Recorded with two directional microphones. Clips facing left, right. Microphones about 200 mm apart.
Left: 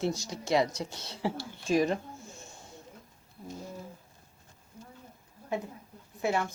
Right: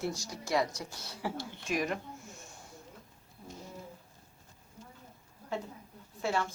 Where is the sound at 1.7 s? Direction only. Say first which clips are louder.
Left 7 dB; 30° left (ahead or behind).